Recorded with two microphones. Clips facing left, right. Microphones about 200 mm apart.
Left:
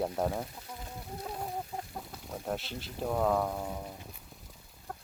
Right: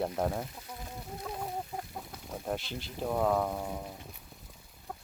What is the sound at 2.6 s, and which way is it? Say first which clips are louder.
Speech: right 1 dB; 35° left (ahead or behind).